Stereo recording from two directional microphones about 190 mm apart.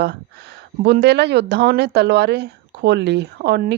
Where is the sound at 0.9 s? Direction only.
60° right (ahead or behind).